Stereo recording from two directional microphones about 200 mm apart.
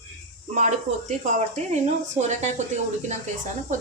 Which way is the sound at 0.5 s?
35° right (ahead or behind).